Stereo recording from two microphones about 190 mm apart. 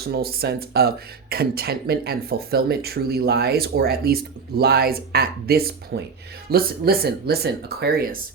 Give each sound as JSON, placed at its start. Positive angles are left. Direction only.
{"t": 0.0, "sound": "speech", "side_deg": -55}